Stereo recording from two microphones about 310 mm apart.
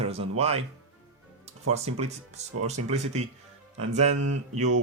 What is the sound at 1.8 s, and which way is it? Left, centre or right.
Speech, centre.